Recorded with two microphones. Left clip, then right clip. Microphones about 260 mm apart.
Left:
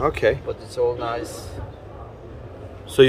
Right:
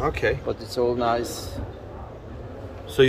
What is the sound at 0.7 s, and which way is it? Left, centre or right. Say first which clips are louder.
Speech: even; right.